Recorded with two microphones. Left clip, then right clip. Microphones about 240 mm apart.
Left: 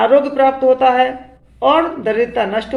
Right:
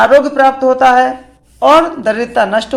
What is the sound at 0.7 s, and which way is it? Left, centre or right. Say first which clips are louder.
Speech: right 4 dB; right.